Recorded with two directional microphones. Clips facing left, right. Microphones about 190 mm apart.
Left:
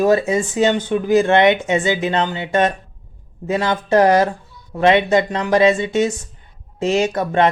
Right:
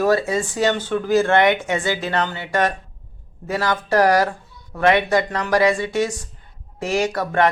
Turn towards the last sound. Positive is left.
turn(degrees=20)  # may be behind; listen again after turning